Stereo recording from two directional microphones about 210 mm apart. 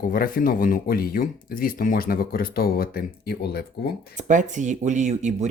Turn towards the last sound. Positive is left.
turn(degrees=-35)  # may be behind; listen again after turning